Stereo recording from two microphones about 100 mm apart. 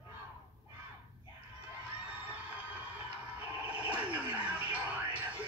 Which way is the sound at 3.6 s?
15° right (ahead or behind).